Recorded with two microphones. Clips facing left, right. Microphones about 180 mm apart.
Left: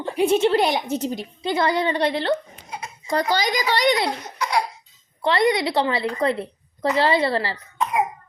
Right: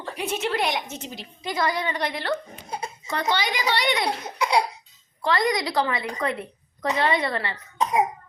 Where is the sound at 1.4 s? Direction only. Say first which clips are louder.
Left 5 dB; 25° left (ahead or behind).